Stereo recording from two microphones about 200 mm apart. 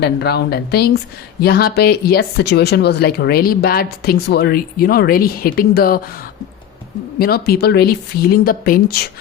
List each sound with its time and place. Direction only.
0.0 s speech: 55° left (ahead or behind)
7.2 s speech: 50° left (ahead or behind)